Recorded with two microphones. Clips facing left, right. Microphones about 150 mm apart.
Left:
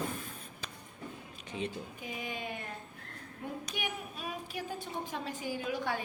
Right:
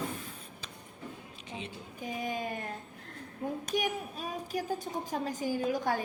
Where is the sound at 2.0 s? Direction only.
40° right (ahead or behind).